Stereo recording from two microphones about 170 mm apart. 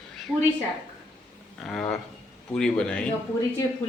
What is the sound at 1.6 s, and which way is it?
A man's voice, 5° left (ahead or behind).